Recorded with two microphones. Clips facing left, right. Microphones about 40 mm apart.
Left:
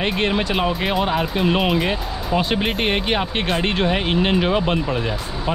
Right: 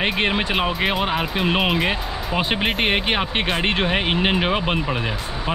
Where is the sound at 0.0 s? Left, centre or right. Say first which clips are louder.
Even; centre.